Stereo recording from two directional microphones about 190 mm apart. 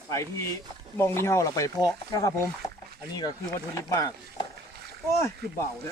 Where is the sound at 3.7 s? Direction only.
15° left (ahead or behind).